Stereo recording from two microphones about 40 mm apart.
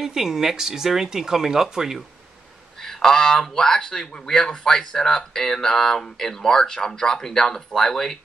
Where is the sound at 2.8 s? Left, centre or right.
Centre.